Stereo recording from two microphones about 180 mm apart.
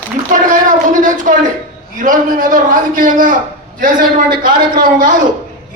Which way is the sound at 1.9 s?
45° right (ahead or behind).